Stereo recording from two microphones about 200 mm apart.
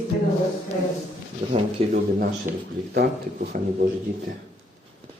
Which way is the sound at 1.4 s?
25° right (ahead or behind).